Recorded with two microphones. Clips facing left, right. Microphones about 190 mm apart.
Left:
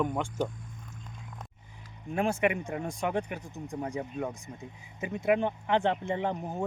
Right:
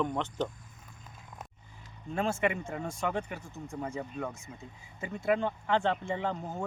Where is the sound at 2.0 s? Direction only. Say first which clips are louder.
Left 2 dB; 15° left (ahead or behind).